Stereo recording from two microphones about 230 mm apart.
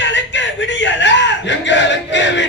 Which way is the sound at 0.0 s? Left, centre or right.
Left.